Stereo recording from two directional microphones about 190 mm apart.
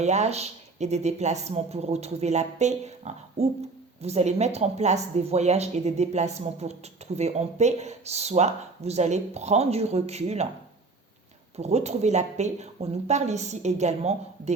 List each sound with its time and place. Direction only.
0.0 s speech: 35° right (ahead or behind)
11.5 s speech: 35° right (ahead or behind)